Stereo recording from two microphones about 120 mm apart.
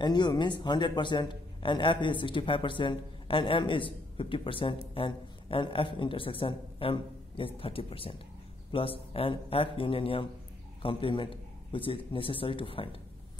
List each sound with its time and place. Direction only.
0.0 s a man's voice: 35° left (ahead or behind)